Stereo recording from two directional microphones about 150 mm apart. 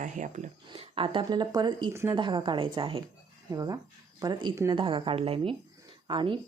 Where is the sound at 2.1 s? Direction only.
30° right (ahead or behind).